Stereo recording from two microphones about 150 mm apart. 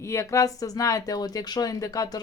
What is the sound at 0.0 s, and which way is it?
Speech, 20° left (ahead or behind).